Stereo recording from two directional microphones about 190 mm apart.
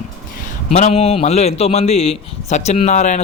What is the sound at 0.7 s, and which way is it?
A man's voice, 35° left (ahead or behind).